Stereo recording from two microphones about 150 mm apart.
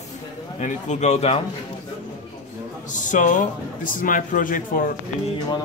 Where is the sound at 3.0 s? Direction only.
60° left (ahead or behind).